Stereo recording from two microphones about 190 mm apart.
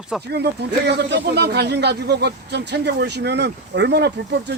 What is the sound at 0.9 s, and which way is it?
Speech, 65° right (ahead or behind).